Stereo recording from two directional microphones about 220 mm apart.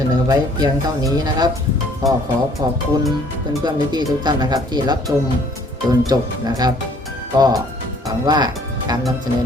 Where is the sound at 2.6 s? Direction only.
15° right (ahead or behind).